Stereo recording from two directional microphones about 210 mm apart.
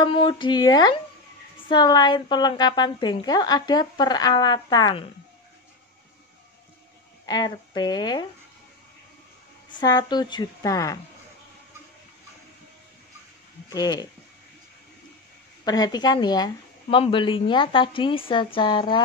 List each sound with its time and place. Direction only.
0.0 s a woman's voice: 20° left (ahead or behind)
7.2 s a woman's voice: 20° left (ahead or behind)
9.8 s a woman's voice: 20° left (ahead or behind)
13.7 s speech: 20° left (ahead or behind)
15.6 s a woman's voice: 20° left (ahead or behind)